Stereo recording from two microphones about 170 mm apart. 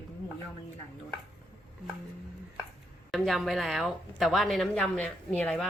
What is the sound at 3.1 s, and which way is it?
A woman's voice, centre (ahead or behind).